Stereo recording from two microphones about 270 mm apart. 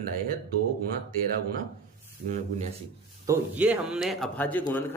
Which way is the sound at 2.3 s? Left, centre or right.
Right.